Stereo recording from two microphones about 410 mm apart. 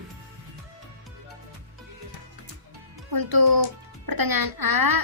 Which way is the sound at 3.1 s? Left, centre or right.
Right.